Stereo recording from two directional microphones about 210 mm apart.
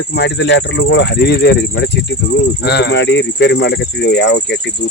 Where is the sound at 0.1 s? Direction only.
55° left (ahead or behind).